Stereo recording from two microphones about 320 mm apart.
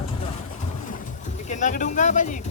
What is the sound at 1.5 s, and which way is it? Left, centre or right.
Speech, left.